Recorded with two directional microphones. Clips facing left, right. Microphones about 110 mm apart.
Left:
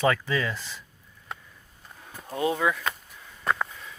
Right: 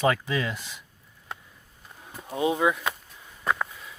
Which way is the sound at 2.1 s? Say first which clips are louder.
Right 1 dB; 10° right (ahead or behind).